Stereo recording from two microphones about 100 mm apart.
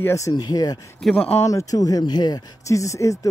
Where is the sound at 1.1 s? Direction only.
75° left (ahead or behind).